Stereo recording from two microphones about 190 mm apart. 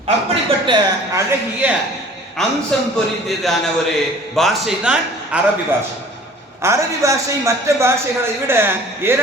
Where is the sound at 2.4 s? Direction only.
Centre (ahead or behind).